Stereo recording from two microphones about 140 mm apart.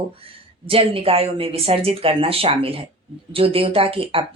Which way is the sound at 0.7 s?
40° right (ahead or behind).